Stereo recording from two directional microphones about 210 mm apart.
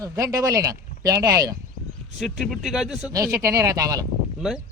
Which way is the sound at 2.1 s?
Centre (ahead or behind).